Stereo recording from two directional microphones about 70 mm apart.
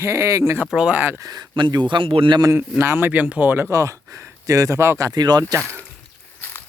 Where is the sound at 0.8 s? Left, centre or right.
Centre.